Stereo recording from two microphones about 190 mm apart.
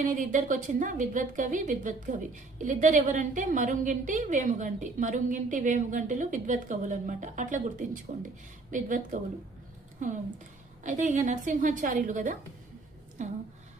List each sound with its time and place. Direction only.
0.0 s a woman's voice: 45° right (ahead or behind)
10.0 s a woman's voice: 40° right (ahead or behind)